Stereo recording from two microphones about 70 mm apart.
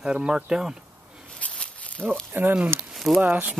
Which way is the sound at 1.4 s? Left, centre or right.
Centre.